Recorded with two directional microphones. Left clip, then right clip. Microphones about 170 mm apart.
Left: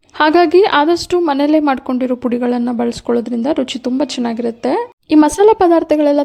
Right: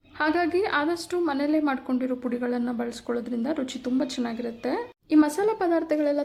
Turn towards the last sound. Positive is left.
turn(degrees=45)  # may be behind; listen again after turning